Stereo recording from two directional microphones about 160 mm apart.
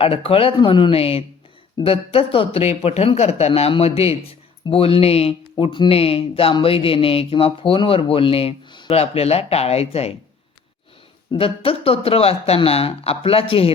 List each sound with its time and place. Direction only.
0.0 s speech: 35° left (ahead or behind)
11.3 s speech: 35° left (ahead or behind)